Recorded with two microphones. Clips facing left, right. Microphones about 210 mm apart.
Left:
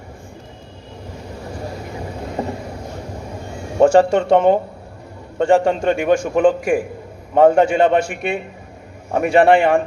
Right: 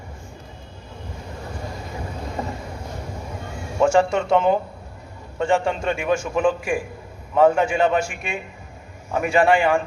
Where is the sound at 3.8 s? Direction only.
35° left (ahead or behind).